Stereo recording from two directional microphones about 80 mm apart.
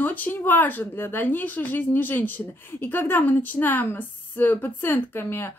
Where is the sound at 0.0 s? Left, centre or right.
Left.